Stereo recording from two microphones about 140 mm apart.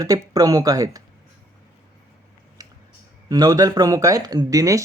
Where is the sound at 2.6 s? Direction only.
25° right (ahead or behind).